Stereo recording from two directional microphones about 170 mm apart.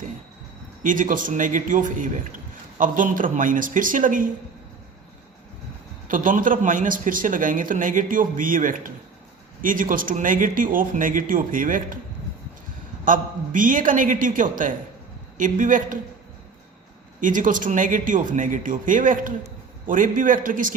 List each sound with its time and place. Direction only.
0.8 s a man's voice: 50° right (ahead or behind)
6.1 s a man's voice: 50° right (ahead or behind)
13.1 s a man's voice: 50° right (ahead or behind)
17.2 s a man's voice: 50° right (ahead or behind)